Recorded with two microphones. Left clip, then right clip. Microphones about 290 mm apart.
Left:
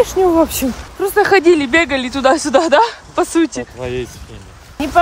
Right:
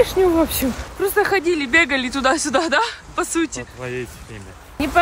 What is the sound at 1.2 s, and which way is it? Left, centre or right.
Speech, left.